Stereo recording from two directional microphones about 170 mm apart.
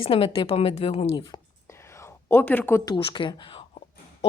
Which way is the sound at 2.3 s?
10° left (ahead or behind).